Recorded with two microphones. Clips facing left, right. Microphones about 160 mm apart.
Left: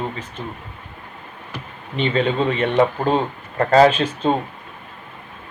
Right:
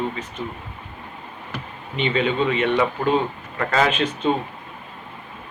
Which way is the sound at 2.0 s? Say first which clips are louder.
Left 2 dB; 40° left (ahead or behind).